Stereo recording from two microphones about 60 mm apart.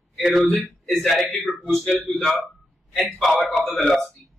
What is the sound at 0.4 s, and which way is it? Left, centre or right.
Speech, left.